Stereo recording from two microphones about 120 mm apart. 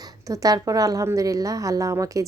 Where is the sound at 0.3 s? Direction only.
30° right (ahead or behind).